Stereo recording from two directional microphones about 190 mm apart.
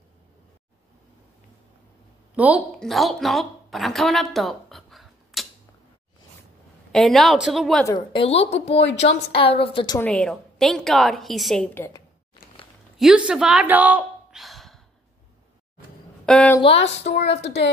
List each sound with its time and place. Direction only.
2.3 s a woman's voice: 5° right (ahead or behind)
6.9 s a woman's voice: centre (ahead or behind)
7.8 s a woman's voice: 25° left (ahead or behind)
9.9 s a woman's voice: 5° left (ahead or behind)
12.9 s a woman's voice: 5° right (ahead or behind)
16.3 s a woman's voice: 5° left (ahead or behind)
16.7 s speech: 65° left (ahead or behind)